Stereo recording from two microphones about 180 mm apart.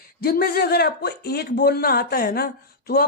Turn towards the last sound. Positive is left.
turn(degrees=60)  # may be behind; listen again after turning